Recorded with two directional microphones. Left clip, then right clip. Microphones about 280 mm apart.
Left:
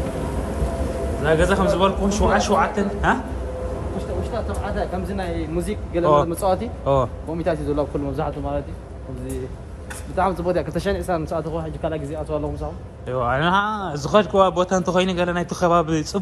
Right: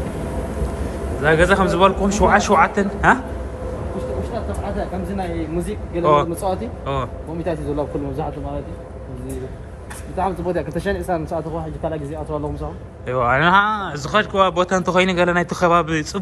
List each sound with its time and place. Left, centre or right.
1.2 s speech: centre
4.5 s speech: centre
6.8 s a man's voice: centre
7.4 s speech: centre
10.1 s speech: centre
13.1 s speech: centre